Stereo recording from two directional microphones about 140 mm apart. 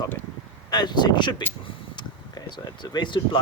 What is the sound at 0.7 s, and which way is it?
Speech, 30° left (ahead or behind).